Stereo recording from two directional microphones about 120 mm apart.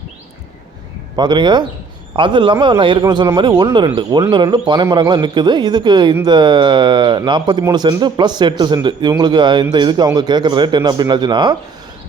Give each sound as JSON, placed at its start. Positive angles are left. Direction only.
{"t": 1.1, "sound": "speech", "side_deg": -35}